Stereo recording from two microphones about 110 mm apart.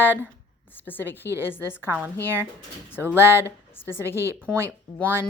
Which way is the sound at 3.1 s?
20° left (ahead or behind).